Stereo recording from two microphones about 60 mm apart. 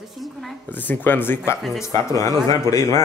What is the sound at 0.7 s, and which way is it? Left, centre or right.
Speech, left.